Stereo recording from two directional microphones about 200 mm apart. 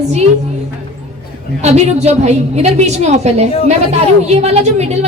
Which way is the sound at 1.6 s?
35° right (ahead or behind).